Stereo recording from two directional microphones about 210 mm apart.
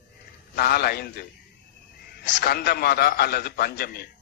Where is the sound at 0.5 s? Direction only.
45° left (ahead or behind).